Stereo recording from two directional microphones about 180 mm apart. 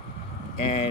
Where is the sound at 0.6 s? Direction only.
30° left (ahead or behind).